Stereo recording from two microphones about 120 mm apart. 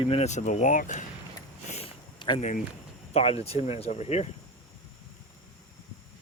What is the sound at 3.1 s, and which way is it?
Speech, 55° left (ahead or behind).